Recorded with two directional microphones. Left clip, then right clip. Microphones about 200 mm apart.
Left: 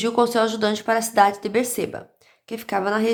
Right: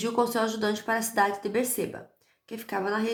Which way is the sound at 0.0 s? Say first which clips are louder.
Left 7 dB; 30° left (ahead or behind).